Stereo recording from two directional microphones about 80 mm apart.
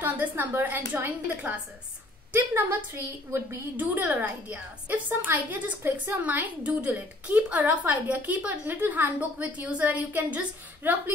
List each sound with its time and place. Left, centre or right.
0.0 s a woman's voice: right
3.7 s a woman's voice: right